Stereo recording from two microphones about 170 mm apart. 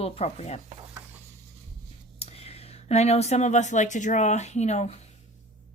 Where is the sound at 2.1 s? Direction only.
35° left (ahead or behind).